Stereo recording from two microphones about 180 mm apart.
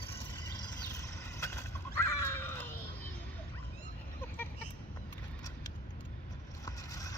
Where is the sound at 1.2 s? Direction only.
15° left (ahead or behind).